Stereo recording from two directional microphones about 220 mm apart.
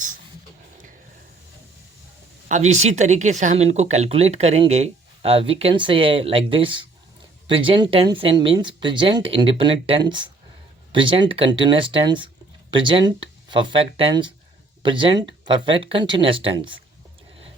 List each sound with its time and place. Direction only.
2.5 s speech: 30° right (ahead or behind)